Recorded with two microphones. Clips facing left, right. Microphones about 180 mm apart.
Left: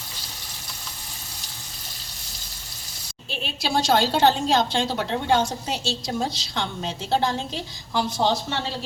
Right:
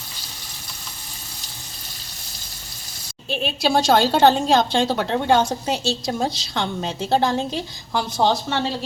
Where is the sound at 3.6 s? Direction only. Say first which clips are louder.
Right 4 dB; 55° right (ahead or behind).